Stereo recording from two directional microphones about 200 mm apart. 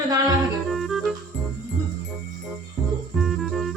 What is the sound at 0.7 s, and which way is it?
Music, centre (ahead or behind).